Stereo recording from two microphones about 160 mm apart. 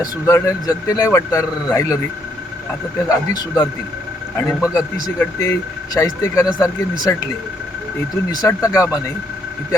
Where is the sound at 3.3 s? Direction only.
25° left (ahead or behind).